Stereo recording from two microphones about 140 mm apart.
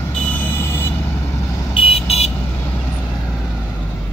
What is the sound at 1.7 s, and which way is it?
Vehicle, 45° left (ahead or behind).